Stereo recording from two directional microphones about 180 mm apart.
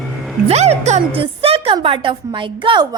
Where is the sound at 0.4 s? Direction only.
35° right (ahead or behind).